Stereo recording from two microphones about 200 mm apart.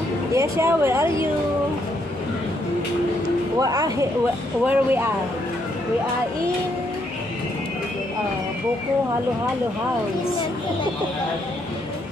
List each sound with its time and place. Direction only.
0.3 s speech: 15° right (ahead or behind)
3.5 s speech: 20° right (ahead or behind)